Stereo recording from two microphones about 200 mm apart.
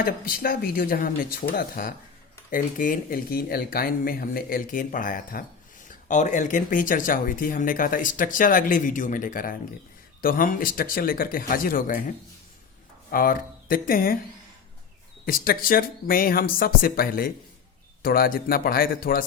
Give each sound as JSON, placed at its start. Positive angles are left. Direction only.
{"t": 0.0, "sound": "speech", "side_deg": 45}
{"t": 15.4, "sound": "speech", "side_deg": 45}